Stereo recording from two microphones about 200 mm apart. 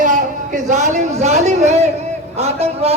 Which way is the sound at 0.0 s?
40° right (ahead or behind).